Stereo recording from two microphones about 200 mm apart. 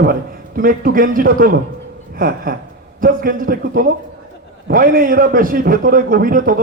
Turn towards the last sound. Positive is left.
turn(degrees=-45)  # may be behind; listen again after turning